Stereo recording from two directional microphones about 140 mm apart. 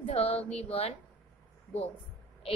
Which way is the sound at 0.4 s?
45° left (ahead or behind).